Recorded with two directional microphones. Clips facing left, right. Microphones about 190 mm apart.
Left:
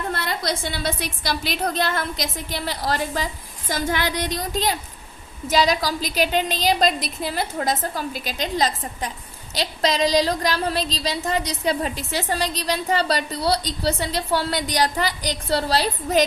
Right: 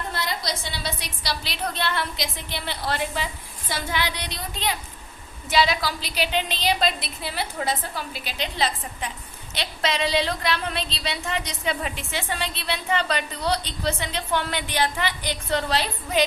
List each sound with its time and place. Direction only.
0.1 s a woman's voice: 55° left (ahead or behind); by 16.2 s 40° left (ahead or behind)